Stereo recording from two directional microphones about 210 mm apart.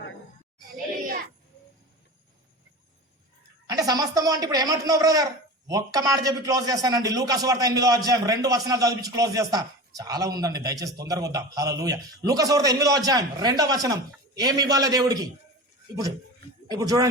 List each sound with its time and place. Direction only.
3.7 s speech: 15° right (ahead or behind)
16.6 s speech: 15° right (ahead or behind)